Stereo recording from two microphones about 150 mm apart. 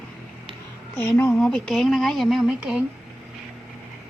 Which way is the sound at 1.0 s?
15° left (ahead or behind).